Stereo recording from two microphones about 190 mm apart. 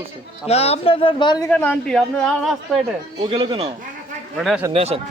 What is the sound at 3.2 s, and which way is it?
Speech, 25° right (ahead or behind).